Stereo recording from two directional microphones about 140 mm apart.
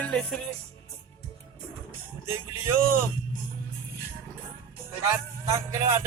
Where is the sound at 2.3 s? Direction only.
15° right (ahead or behind).